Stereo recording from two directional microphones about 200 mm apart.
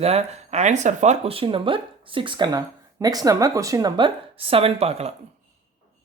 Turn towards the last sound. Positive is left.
turn(degrees=-30)  # may be behind; listen again after turning